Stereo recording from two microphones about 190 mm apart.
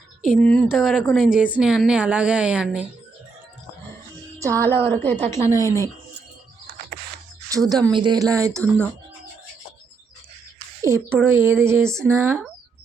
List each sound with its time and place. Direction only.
0.3 s a woman's voice: 5° left (ahead or behind)
4.9 s speech: 10° left (ahead or behind)
7.5 s speech: 20° right (ahead or behind)
10.8 s speech: 15° right (ahead or behind)